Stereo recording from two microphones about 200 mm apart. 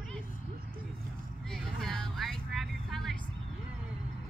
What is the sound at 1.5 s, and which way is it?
Vehicle, centre (ahead or behind).